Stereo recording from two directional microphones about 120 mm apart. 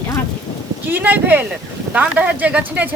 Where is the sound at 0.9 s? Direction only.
15° right (ahead or behind).